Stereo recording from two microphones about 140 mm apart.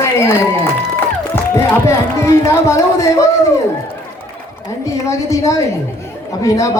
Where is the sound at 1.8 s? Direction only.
20° left (ahead or behind).